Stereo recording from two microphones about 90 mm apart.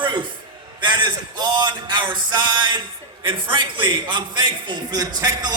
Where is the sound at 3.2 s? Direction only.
70° right (ahead or behind).